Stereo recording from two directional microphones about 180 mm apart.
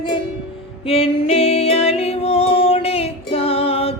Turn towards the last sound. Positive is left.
turn(degrees=30)  # may be behind; listen again after turning